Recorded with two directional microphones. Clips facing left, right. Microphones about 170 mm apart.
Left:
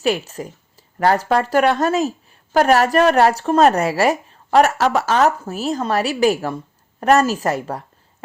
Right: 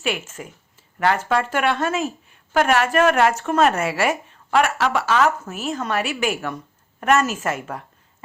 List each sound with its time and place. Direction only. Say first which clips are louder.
0.0 s speech: left 6 dB; 35° left (ahead or behind)